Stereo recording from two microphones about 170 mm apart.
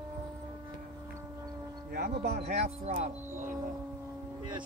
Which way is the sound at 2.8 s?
45° right (ahead or behind).